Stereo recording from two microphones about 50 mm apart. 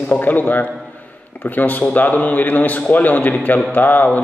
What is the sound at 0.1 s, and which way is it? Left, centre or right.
A man's voice, left.